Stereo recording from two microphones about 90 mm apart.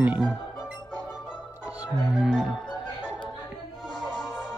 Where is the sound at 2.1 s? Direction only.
5° right (ahead or behind).